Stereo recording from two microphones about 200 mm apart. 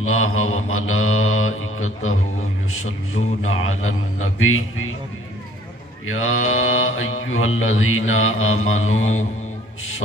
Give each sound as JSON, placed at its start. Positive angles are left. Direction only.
{"t": 0.0, "sound": "mantra", "side_deg": 90}
{"t": 3.6, "sound": "mantra", "side_deg": 90}
{"t": 6.0, "sound": "mantra", "side_deg": 90}